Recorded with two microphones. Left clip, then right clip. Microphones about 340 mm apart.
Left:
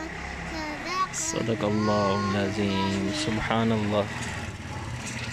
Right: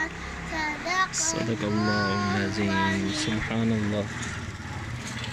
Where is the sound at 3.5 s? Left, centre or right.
Left.